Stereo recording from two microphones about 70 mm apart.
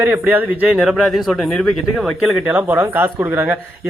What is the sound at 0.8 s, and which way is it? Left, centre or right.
Speech, centre.